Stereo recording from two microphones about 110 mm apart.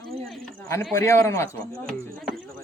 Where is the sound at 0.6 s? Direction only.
25° left (ahead or behind).